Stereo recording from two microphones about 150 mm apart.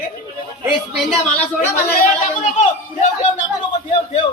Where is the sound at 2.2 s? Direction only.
50° left (ahead or behind).